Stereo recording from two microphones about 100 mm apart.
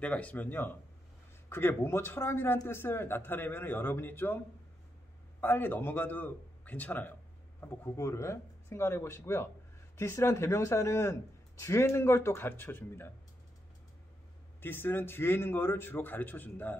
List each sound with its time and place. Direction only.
0.0 s a man's voice: 15° left (ahead or behind)
5.4 s a man's voice: 20° left (ahead or behind)
14.6 s a man's voice: 20° left (ahead or behind)